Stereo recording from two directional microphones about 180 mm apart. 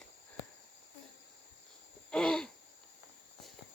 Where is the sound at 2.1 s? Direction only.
5° left (ahead or behind).